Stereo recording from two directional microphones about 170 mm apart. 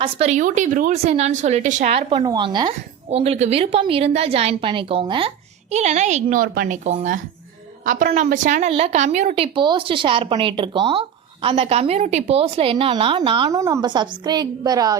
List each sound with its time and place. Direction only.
0.0 s a woman's voice: 40° right (ahead or behind)
5.7 s speech: 40° right (ahead or behind); by 6.7 s 55° right (ahead or behind)
6.8 s a woman's voice: 45° right (ahead or behind); by 14.9 s 20° right (ahead or behind)